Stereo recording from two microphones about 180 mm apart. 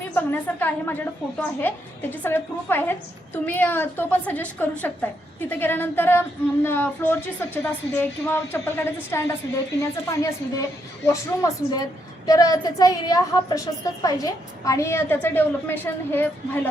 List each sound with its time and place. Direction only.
0.1 s a woman's voice: 10° left (ahead or behind)